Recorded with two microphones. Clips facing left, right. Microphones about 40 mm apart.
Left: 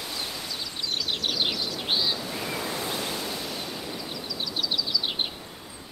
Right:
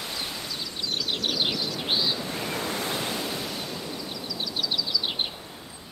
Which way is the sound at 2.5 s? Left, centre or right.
Right.